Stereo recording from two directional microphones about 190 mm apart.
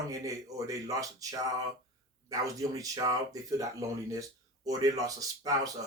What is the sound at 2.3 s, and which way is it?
Speech, 20° right (ahead or behind).